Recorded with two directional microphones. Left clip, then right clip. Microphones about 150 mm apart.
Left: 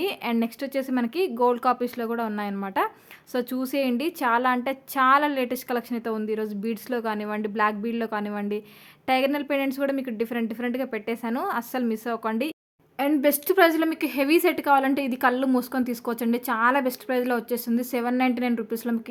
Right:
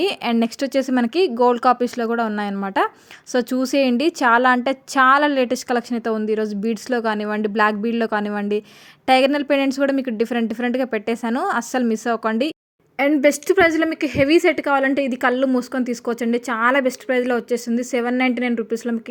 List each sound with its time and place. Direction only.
0.0 s a woman's voice: 40° right (ahead or behind); by 18.9 s 10° right (ahead or behind)